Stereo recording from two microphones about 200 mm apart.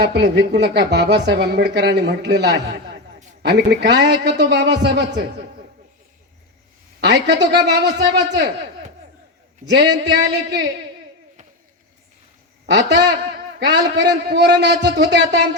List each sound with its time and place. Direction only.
0.0 s a woman's voice: 55° right (ahead or behind)
7.0 s a woman's voice: 60° right (ahead or behind)
9.6 s a woman's voice: 55° right (ahead or behind)
12.6 s a woman's voice: 60° right (ahead or behind)